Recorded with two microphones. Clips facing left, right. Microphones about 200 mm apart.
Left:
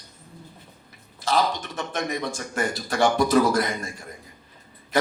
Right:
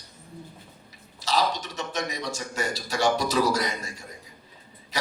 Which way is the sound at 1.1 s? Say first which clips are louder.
Left 2 dB; 55° left (ahead or behind).